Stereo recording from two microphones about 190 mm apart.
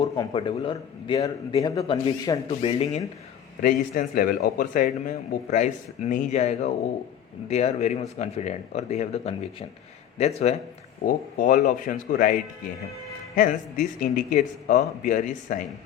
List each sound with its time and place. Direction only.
0.0 s a man's voice: 25° left (ahead or behind)
3.6 s a man's voice: 50° left (ahead or behind)
11.0 s a man's voice: 45° left (ahead or behind)